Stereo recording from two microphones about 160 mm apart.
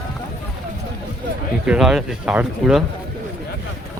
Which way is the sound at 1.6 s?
5° right (ahead or behind).